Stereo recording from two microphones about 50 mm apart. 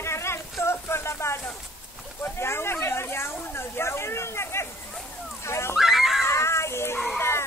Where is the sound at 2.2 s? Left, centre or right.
Left.